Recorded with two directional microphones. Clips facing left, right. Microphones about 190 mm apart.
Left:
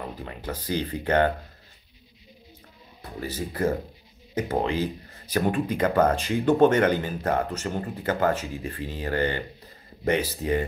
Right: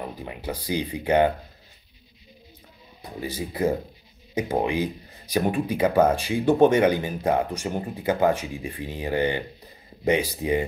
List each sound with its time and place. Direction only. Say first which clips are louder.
0.0 s speech: right 2 dB; 15° right (ahead or behind)
3.0 s speech: right 1 dB; 15° right (ahead or behind)